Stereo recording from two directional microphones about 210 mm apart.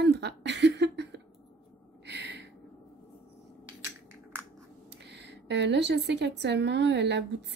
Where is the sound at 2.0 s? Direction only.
55° right (ahead or behind).